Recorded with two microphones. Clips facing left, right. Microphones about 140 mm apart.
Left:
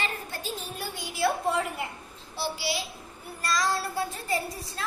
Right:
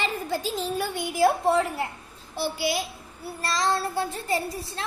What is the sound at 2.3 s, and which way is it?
Speech, 50° right (ahead or behind).